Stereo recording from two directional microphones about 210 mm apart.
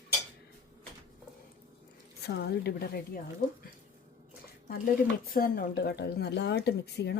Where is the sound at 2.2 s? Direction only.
50° left (ahead or behind).